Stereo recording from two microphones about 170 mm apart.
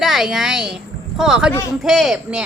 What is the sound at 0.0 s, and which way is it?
A woman's voice, centre (ahead or behind).